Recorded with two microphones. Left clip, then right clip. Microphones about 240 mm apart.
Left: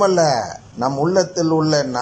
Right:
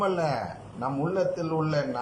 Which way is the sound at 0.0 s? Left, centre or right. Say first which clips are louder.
Left 11 dB; left.